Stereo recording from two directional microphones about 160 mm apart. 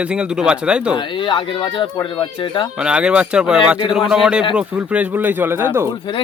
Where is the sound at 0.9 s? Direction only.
30° left (ahead or behind).